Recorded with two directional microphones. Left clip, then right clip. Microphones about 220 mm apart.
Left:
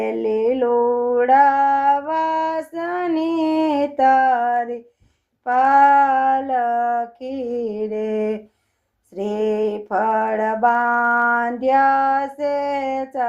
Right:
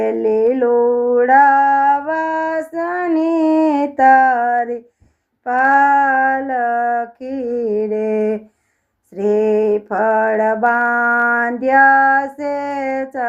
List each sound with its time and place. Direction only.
0.0 s music: 25° right (ahead or behind)
5.5 s female singing: 25° right (ahead or behind)
7.2 s a sound: 25° right (ahead or behind)
9.1 s mantra: 25° right (ahead or behind)
11.3 s female singing: 25° right (ahead or behind)